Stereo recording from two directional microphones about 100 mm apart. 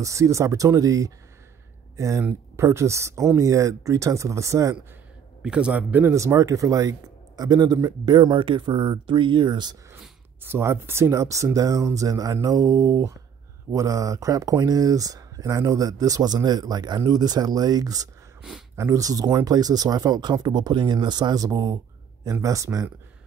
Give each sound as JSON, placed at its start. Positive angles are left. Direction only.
{"t": 0.0, "sound": "speech", "side_deg": -30}
{"t": 5.4, "sound": "a man's voice", "side_deg": -10}
{"t": 6.1, "sound": "speech", "side_deg": -30}
{"t": 10.4, "sound": "speech", "side_deg": -25}